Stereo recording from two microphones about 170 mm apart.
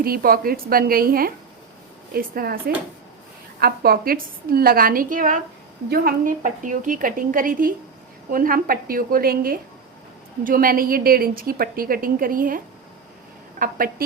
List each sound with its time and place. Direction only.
0.0 s a woman's voice: 60° right (ahead or behind)